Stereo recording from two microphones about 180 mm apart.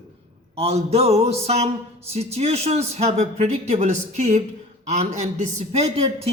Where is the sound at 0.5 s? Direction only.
35° right (ahead or behind).